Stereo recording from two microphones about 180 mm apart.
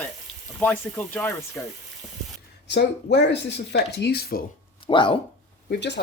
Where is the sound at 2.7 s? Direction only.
75° left (ahead or behind).